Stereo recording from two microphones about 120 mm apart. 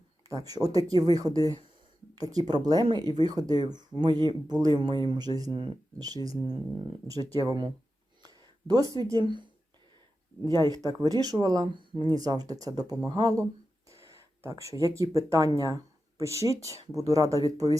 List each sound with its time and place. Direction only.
0.4 s speech: 30° right (ahead or behind)
5.5 s speech: 45° right (ahead or behind)
6.0 s speech: 30° right (ahead or behind)
8.2 s a sound: 35° right (ahead or behind)
9.0 s speech: 40° right (ahead or behind)